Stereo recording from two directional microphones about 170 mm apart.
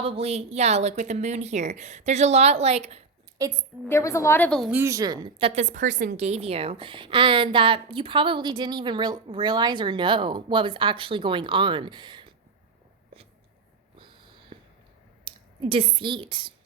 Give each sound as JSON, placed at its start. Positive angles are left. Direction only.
{"t": 0.0, "sound": "speech", "side_deg": -35}
{"t": 3.3, "sound": "a woman's voice", "side_deg": -20}
{"t": 3.8, "sound": "a woman's voice", "side_deg": 15}
{"t": 4.7, "sound": "speech", "side_deg": -15}
{"t": 6.1, "sound": "a woman's voice", "side_deg": -40}
{"t": 14.5, "sound": "a sound", "side_deg": -35}
{"t": 15.7, "sound": "a woman's voice", "side_deg": -35}